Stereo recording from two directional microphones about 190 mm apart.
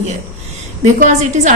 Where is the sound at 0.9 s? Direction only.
40° right (ahead or behind).